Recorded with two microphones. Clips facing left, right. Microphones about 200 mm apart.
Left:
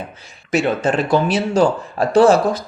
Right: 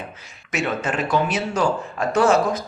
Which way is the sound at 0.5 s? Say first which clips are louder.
Left 7 dB; 30° left (ahead or behind).